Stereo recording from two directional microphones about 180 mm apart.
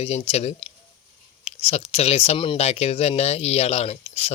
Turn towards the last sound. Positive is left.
turn(degrees=35)  # may be behind; listen again after turning